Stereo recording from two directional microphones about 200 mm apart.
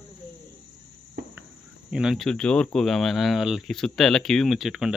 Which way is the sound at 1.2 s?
55° right (ahead or behind).